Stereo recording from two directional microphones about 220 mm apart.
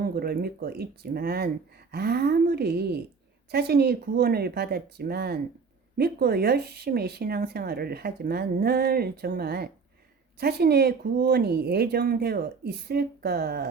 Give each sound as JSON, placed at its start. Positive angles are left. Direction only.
{"t": 0.0, "sound": "speech", "side_deg": -45}